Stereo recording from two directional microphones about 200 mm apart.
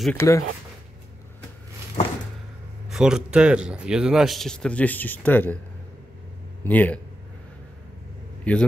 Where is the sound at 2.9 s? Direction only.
5° right (ahead or behind).